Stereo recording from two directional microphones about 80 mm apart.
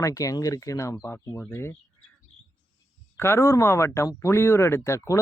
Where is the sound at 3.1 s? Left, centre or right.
Left.